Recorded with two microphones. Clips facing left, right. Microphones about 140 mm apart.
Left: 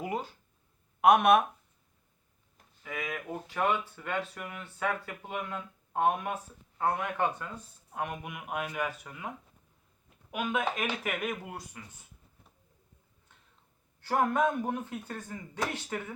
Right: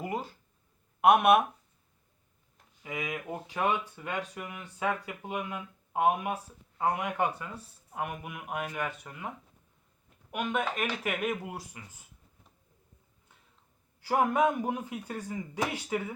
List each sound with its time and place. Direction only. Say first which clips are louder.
0.0 s a sound: even; centre (ahead or behind)
1.0 s speech: even; 5° right (ahead or behind)
2.8 s speech: right 1 dB; 15° right (ahead or behind); by 9.3 s centre (ahead or behind)
10.3 s speech: even; 5° left (ahead or behind)
14.0 s speech: right 1 dB; 10° right (ahead or behind)